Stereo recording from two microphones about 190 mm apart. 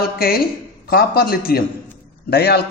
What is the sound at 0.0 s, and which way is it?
A man's voice, 50° left (ahead or behind).